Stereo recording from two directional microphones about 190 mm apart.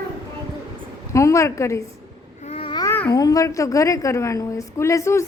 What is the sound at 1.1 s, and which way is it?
Speech, 15° left (ahead or behind).